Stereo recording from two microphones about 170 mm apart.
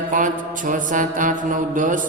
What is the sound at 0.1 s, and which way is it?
Mantra, 50° right (ahead or behind).